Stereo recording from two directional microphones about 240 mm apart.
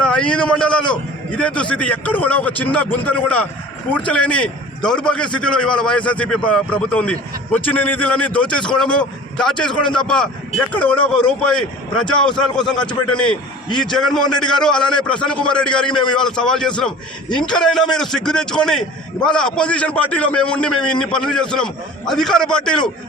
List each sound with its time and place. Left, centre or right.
0.0 s a man's voice: centre
12.7 s a man's voice: centre
13.1 s a man's voice: centre